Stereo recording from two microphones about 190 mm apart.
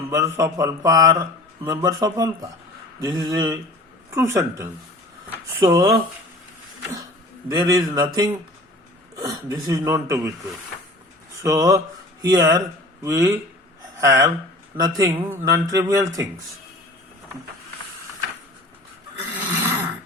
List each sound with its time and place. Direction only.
0.1 s speech: 15° right (ahead or behind)
7.5 s speech: 20° right (ahead or behind)
11.4 s speech: 20° right (ahead or behind)
19.2 s a sound: 15° right (ahead or behind)